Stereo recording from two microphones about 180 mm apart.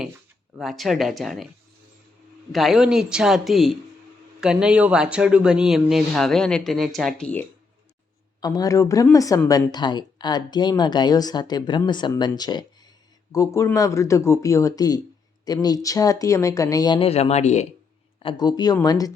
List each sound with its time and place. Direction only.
0.5 s speech: centre (ahead or behind)
2.5 s speech: centre (ahead or behind)
8.4 s speech: 20° left (ahead or behind); by 17.7 s 40° left (ahead or behind)
18.2 s speech: 25° left (ahead or behind)